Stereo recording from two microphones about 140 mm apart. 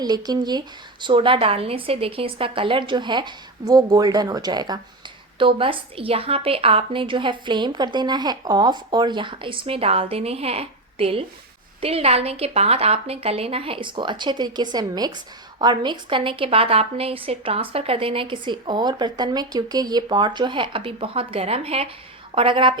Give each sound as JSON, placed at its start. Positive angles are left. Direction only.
{"t": 0.0, "sound": "a woman's voice", "side_deg": -30}